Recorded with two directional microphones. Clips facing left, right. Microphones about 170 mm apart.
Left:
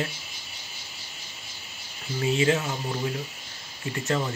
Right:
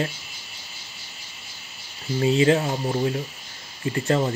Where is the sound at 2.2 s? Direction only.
35° right (ahead or behind).